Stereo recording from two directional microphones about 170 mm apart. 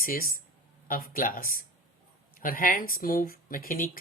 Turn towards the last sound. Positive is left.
turn(degrees=55)  # may be behind; listen again after turning